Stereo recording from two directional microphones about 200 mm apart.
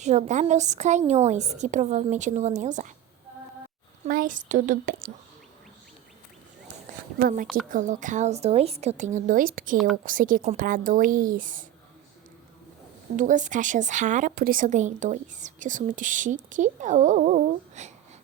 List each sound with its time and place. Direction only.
0.0 s speech: 35° right (ahead or behind)
4.0 s speech: 45° right (ahead or behind)
7.2 s a woman's voice: 45° right (ahead or behind)
9.7 s a woman's voice: centre (ahead or behind)
10.0 s a woman's voice: 40° right (ahead or behind)
13.1 s speech: 40° right (ahead or behind)